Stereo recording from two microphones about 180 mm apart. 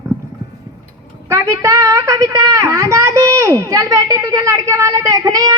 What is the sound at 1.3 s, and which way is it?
A woman's voice, 15° right (ahead or behind).